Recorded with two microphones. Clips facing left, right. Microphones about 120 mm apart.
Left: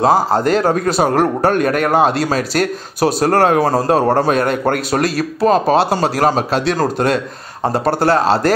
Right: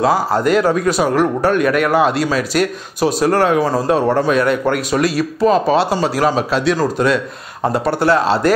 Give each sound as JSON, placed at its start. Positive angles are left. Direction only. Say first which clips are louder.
{"t": 0.0, "sound": "a man's voice", "louder": "left 2 dB", "side_deg": 35}
{"t": 1.0, "sound": "a man's voice", "louder": "left 2 dB", "side_deg": 45}
{"t": 7.7, "sound": "a man's voice", "louder": "left 1 dB", "side_deg": 40}